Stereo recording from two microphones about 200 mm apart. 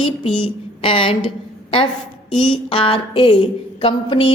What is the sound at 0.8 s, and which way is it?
Speech, 25° left (ahead or behind).